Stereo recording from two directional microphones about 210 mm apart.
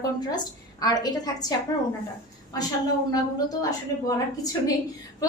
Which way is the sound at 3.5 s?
15° left (ahead or behind).